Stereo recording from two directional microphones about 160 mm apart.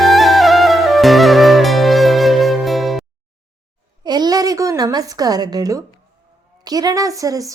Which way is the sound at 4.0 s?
25° right (ahead or behind).